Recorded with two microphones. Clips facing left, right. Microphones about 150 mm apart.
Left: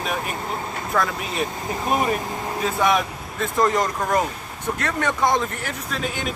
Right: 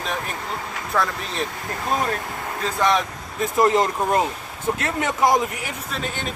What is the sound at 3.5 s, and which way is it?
Speech, 25° right (ahead or behind).